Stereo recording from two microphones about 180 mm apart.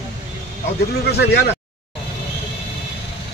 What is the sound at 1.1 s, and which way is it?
Speech, 65° left (ahead or behind).